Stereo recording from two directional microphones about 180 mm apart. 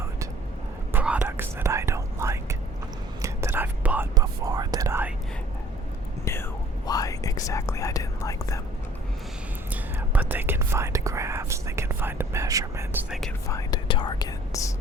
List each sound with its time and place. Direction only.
0.9 s whispering: 5° right (ahead or behind)
4.1 s whispering: 20° right (ahead or behind)
6.8 s whispering: 20° left (ahead or behind)
10.1 s whispering: 10° right (ahead or behind)
13.5 s whispering: 20° left (ahead or behind)